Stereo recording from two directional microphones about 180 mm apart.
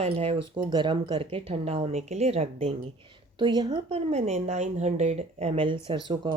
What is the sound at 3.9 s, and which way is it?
Speech, 35° right (ahead or behind).